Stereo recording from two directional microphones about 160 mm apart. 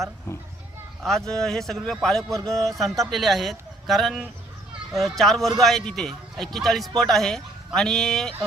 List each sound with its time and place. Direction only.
0.3 s speech: 20° left (ahead or behind)
1.3 s a man's voice: centre (ahead or behind)